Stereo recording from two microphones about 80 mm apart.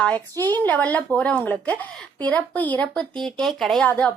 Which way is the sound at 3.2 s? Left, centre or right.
Centre.